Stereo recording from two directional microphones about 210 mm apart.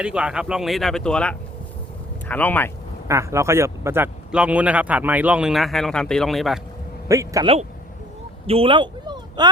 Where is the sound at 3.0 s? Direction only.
15° right (ahead or behind).